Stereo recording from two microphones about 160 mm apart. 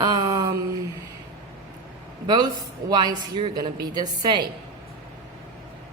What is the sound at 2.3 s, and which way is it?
A woman's voice, 25° right (ahead or behind).